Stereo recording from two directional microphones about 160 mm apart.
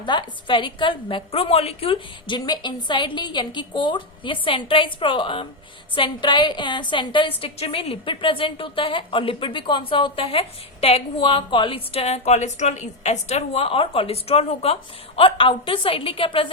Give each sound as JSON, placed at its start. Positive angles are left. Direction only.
{"t": 0.0, "sound": "a woman's voice", "side_deg": 30}